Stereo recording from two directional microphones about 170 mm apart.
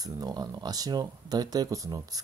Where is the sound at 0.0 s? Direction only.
25° right (ahead or behind).